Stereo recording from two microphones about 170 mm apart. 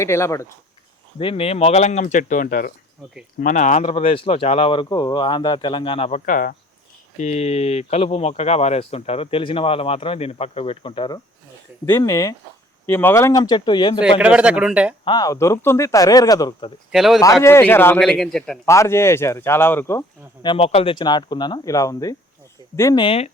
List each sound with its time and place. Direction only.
0.0 s speech: 15° left (ahead or behind)
1.2 s speech: 35° left (ahead or behind); by 2.7 s 55° left (ahead or behind)
3.4 s speech: 45° left (ahead or behind)
7.2 s speech: 40° left (ahead or behind)
11.9 s speech: 20° left (ahead or behind)
14.2 s speech: 5° right (ahead or behind)
15.0 s speech: 25° left (ahead or behind)
16.9 s a man's voice: centre (ahead or behind)
17.4 s speech: 15° left (ahead or behind)
18.0 s a man's voice: centre (ahead or behind)
18.6 s speech: 15° left (ahead or behind)
20.4 s speech: 30° left (ahead or behind)
23.0 s speech: 35° left (ahead or behind)